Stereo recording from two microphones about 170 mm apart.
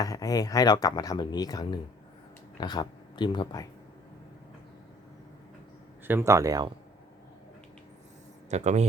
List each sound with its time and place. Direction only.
0.0 s speech: 20° left (ahead or behind)
6.1 s speech: 15° right (ahead or behind)
8.4 s speech: 40° right (ahead or behind)